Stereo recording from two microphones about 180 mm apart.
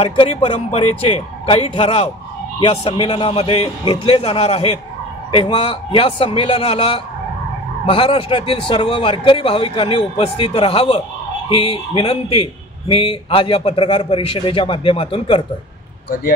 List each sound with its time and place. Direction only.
0.0 s a man's voice: 30° left (ahead or behind)